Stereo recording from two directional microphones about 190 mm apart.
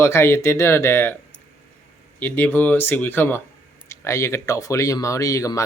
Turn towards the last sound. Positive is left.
turn(degrees=15)  # may be behind; listen again after turning